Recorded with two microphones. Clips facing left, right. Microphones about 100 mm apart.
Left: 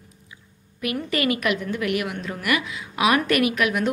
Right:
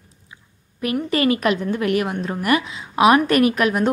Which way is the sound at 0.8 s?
30° right (ahead or behind).